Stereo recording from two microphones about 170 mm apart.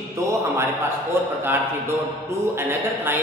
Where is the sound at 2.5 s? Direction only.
15° right (ahead or behind).